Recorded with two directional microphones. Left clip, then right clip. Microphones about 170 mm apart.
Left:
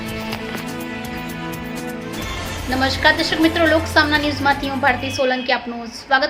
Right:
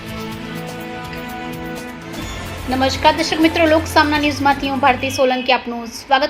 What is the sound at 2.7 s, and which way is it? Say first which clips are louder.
A woman's voice: right 2 dB; 5° right (ahead or behind).